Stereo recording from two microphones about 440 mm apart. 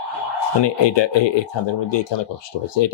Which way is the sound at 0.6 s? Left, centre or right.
Left.